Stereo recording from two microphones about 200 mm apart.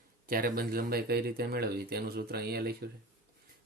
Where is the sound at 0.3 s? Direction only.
45° right (ahead or behind).